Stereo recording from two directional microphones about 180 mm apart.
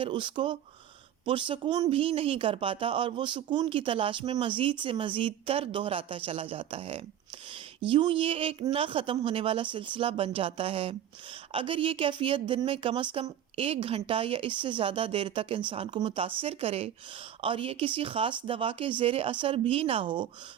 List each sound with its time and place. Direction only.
0.0 s speech: 25° right (ahead or behind)